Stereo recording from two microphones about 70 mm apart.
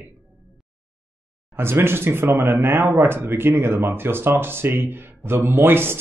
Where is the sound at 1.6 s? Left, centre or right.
Right.